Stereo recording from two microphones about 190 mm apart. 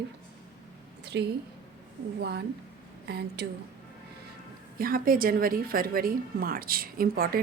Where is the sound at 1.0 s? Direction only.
60° right (ahead or behind).